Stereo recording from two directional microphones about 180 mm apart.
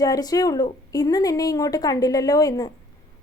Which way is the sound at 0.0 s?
20° left (ahead or behind).